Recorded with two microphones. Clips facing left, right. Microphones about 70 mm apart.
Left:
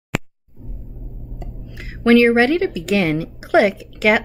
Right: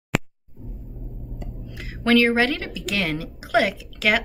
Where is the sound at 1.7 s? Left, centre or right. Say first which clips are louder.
Left 6 dB; left.